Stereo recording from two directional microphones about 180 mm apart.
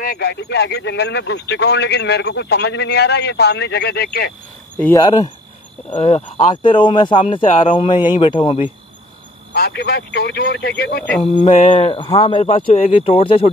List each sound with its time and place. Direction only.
0.0 s speech: 60° left (ahead or behind)
4.9 s speech: 20° left (ahead or behind)
5.9 s speech: 35° left (ahead or behind)
9.5 s speech: 65° left (ahead or behind)
11.3 s speech: 30° left (ahead or behind)